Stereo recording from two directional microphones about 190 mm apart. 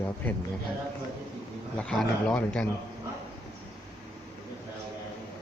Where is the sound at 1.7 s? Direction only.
5° left (ahead or behind).